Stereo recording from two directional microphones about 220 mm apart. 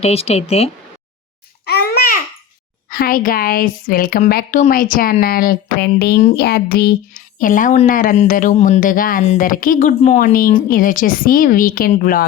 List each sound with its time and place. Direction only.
0.0 s speech: 25° left (ahead or behind)
1.6 s babbling: 45° left (ahead or behind)
2.9 s speech: 40° left (ahead or behind)